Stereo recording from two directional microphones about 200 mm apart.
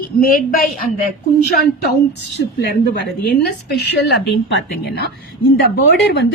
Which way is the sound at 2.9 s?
55° left (ahead or behind).